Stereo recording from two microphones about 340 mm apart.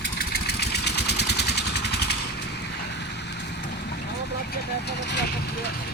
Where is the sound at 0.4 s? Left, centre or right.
Left.